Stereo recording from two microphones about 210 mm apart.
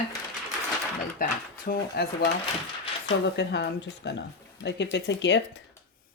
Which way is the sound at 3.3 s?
55° left (ahead or behind).